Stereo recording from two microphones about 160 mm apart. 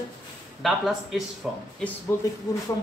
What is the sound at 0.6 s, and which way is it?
Speech, centre (ahead or behind).